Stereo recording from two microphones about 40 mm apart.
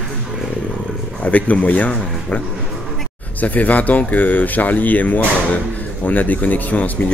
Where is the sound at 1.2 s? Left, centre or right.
Left.